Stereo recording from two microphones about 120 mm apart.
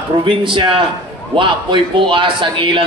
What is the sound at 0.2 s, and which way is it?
Speech, 45° right (ahead or behind).